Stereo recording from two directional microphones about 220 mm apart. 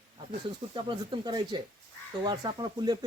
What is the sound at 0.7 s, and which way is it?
Speech, 20° right (ahead or behind).